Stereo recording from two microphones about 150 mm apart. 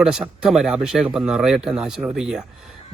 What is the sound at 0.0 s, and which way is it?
Speech, 5° right (ahead or behind).